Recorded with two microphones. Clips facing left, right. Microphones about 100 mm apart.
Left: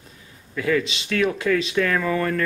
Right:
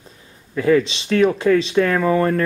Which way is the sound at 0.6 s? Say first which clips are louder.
Right 6 dB; 30° right (ahead or behind).